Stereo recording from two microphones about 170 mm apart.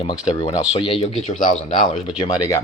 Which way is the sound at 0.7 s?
35° left (ahead or behind).